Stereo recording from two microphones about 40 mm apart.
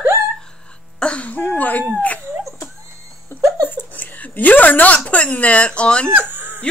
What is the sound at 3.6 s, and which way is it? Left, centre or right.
Speech, left.